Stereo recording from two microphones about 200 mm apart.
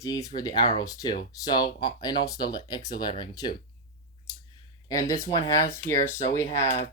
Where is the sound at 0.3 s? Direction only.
20° left (ahead or behind).